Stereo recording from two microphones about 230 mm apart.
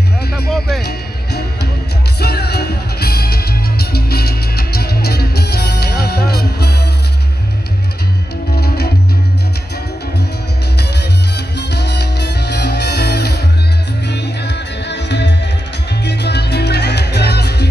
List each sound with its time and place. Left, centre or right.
0.5 s music: centre
0.8 s music: left
8.5 s music: left
11.3 s music: left